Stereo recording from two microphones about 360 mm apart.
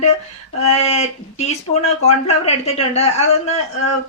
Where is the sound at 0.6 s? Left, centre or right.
Centre.